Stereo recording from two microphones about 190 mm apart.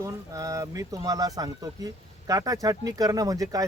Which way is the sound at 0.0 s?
15° right (ahead or behind).